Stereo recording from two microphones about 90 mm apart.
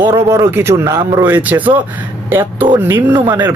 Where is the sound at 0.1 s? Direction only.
35° right (ahead or behind).